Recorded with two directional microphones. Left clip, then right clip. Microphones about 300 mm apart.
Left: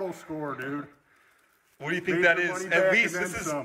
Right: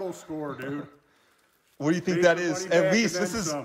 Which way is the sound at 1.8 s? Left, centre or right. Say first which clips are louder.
Right 2 dB; centre.